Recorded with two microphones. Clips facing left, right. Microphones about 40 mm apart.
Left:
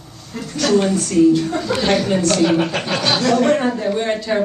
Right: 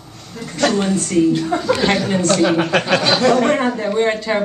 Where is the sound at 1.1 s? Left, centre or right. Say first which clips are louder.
Left 2 dB; right.